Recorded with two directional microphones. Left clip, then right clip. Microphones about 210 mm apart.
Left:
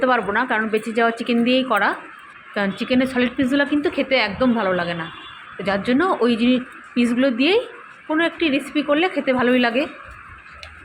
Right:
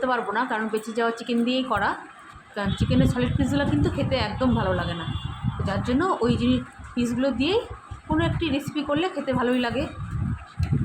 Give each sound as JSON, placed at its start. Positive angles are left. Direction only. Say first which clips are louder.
{"t": 0.0, "sound": "a woman's voice", "louder": "left 6 dB", "side_deg": 15}